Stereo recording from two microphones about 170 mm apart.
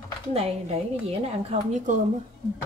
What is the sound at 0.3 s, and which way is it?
Speech, 35° right (ahead or behind).